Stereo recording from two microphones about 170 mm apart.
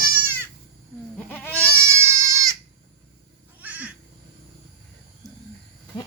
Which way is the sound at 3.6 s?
10° right (ahead or behind).